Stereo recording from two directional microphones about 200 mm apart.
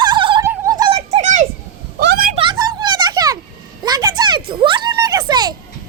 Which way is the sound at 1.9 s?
50° right (ahead or behind).